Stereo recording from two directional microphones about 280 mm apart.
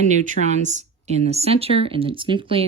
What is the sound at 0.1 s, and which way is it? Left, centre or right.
Speech, right.